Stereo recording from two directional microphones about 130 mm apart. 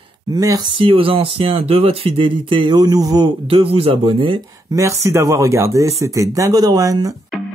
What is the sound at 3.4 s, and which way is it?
Speech, 45° right (ahead or behind).